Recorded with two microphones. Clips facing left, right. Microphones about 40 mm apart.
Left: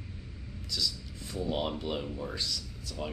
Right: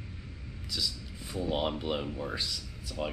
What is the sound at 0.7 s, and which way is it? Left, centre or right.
Speech, centre.